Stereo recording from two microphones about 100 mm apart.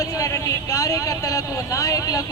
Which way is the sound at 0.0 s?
35° left (ahead or behind).